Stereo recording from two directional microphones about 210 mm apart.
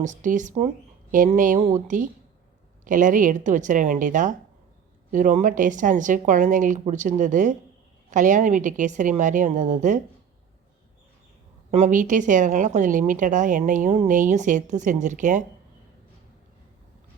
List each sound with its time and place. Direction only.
0.0 s a woman's voice: 35° right (ahead or behind)
11.7 s a woman's voice: 35° right (ahead or behind)